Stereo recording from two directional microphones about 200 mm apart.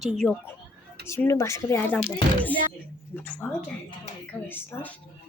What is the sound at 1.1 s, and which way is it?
Speech, 15° left (ahead or behind).